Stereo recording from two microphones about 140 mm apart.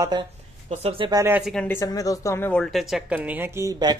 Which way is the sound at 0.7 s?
40° right (ahead or behind).